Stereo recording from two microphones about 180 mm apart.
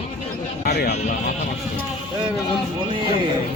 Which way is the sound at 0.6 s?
60° left (ahead or behind).